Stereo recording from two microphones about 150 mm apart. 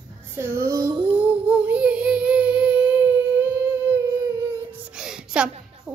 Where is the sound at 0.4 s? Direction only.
20° right (ahead or behind).